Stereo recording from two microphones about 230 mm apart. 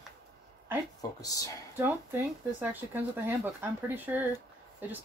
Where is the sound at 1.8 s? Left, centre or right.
Centre.